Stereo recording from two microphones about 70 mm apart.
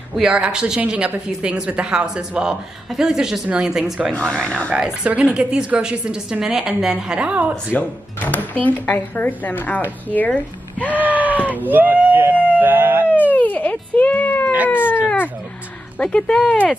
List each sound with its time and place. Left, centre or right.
0.2 s a woman's voice: centre
4.3 s speech: centre
4.7 s a woman's voice: centre
7.7 s speech: left
10.9 s screaming: right
12.5 s emergency vehicle: right
13.1 s a sound: left
14.7 s speech: left
16.0 s speech: centre